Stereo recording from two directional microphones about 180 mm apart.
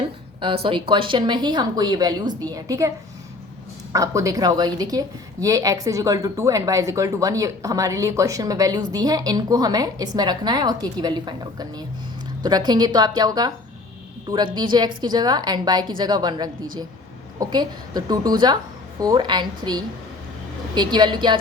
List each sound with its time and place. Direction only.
0.4 s a woman's voice: 30° right (ahead or behind)
3.9 s a woman's voice: 20° right (ahead or behind)